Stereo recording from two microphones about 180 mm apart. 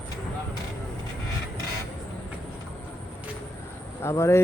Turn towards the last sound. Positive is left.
turn(degrees=15)  # may be behind; listen again after turning